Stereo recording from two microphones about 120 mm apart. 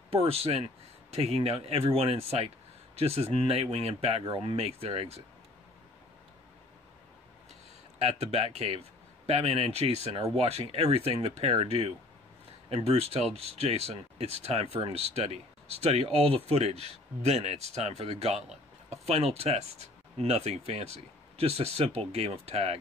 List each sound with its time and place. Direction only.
0.1 s speech: 55° right (ahead or behind)
8.0 s speech: 60° right (ahead or behind)